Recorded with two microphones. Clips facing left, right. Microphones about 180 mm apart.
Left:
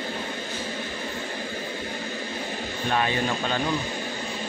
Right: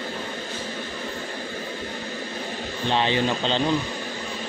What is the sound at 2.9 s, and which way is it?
Speech, 25° right (ahead or behind).